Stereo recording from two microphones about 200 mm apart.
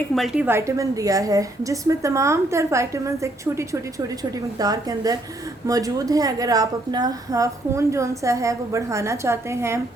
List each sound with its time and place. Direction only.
0.2 s a woman's voice: 10° right (ahead or behind)
4.6 s a woman's voice: 20° right (ahead or behind)